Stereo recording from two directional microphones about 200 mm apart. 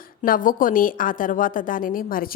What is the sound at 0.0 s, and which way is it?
Speech, 45° left (ahead or behind).